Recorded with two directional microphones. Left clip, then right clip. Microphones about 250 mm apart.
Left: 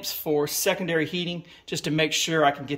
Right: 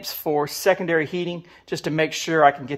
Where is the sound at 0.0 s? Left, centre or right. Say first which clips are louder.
Right 2 dB; centre.